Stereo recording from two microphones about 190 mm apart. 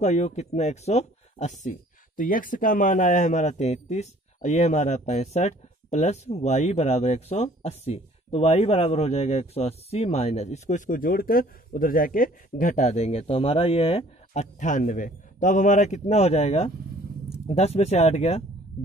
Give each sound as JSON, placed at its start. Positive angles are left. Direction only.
{"t": 0.0, "sound": "speech", "side_deg": 35}